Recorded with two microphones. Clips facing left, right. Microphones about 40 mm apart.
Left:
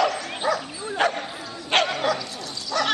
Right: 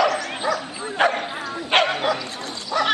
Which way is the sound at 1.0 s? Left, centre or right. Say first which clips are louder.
Right 4 dB; right.